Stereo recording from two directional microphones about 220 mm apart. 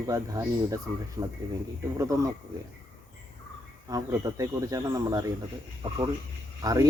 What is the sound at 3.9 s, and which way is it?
A man's voice, 15° right (ahead or behind).